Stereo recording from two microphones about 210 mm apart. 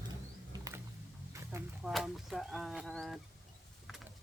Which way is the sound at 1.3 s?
10° right (ahead or behind).